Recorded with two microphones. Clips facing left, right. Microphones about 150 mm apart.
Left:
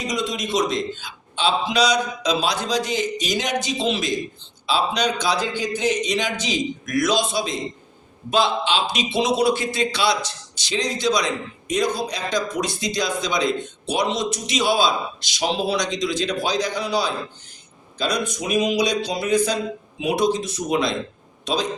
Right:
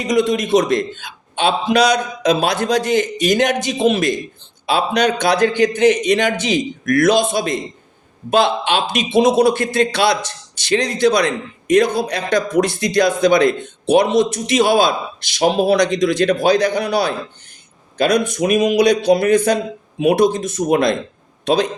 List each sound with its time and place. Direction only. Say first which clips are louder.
0.0 s a man's voice: right 9 dB; 55° right (ahead or behind)